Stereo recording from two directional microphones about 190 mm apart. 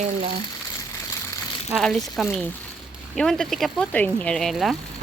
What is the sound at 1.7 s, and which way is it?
Speech, centre (ahead or behind).